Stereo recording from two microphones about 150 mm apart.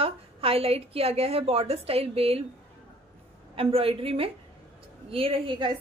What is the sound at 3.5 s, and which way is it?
A woman's voice, 40° right (ahead or behind).